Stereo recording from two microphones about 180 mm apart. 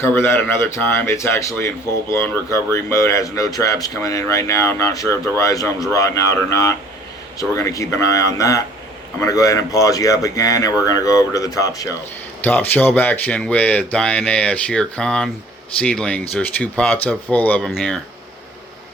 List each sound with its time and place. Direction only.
0.0 s speech: 15° left (ahead or behind)